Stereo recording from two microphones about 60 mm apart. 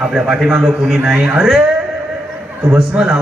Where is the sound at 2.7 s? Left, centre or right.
Centre.